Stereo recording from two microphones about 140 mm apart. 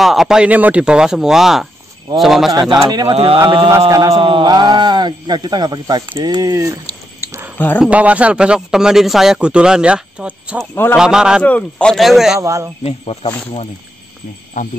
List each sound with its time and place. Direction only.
0.0 s speech: centre (ahead or behind)
2.9 s speech: 30° right (ahead or behind)
7.5 s speech: 15° left (ahead or behind)
7.8 s a man's voice: 10° right (ahead or behind)
10.7 s a man's voice: 15° left (ahead or behind)
11.0 s speech: 5° right (ahead or behind)
11.4 s speech: 10° left (ahead or behind)
12.4 s speech: 20° right (ahead or behind)
12.8 s speech: 45° left (ahead or behind)